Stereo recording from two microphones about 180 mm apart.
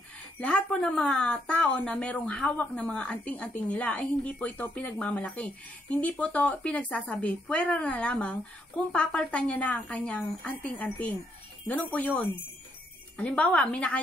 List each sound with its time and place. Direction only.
0.4 s speech: 5° left (ahead or behind)
13.2 s speech: 5° left (ahead or behind)